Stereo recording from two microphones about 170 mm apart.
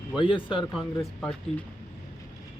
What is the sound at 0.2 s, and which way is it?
Speech, 30° left (ahead or behind).